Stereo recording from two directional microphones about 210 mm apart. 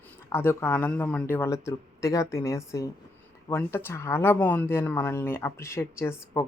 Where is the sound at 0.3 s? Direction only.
10° left (ahead or behind).